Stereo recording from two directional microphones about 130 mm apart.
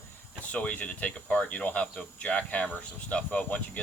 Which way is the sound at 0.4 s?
10° left (ahead or behind).